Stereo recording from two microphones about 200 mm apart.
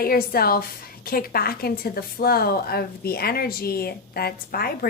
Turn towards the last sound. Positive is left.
turn(degrees=50)  # may be behind; listen again after turning